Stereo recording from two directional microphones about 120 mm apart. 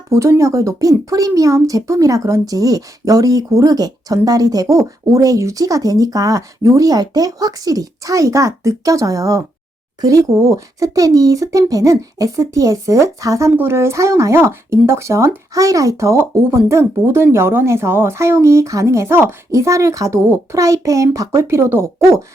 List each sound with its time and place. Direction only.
0.1 s speech: 25° right (ahead or behind)